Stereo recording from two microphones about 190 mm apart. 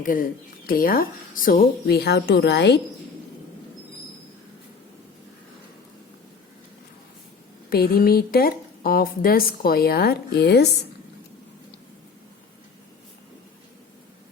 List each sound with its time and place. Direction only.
0.0 s a woman's voice: 45° left (ahead or behind); by 2.8 s 60° left (ahead or behind)
7.7 s a woman's voice: 50° left (ahead or behind)